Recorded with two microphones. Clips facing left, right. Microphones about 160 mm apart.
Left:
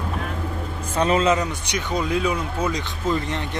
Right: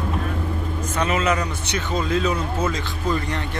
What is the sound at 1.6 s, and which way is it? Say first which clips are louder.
Speech: even; 15° left (ahead or behind).